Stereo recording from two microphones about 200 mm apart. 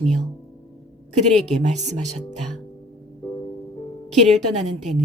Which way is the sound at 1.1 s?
35° right (ahead or behind).